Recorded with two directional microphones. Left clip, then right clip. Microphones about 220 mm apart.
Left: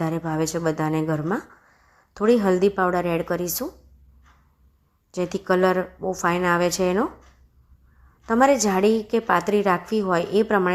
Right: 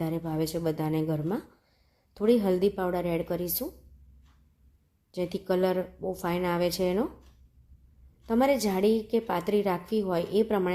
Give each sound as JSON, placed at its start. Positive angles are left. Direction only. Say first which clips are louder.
{"t": 0.0, "sound": "a woman's voice", "louder": "left 6 dB", "side_deg": 10}
{"t": 5.1, "sound": "a woman's voice", "louder": "left 6 dB", "side_deg": 10}
{"t": 8.3, "sound": "a woman's voice", "louder": "left 7 dB", "side_deg": 10}